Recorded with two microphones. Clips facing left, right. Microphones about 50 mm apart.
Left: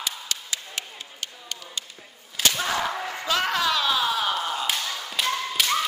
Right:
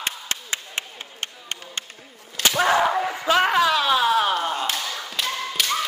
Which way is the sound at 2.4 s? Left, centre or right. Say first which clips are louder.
Right 1 dB; centre.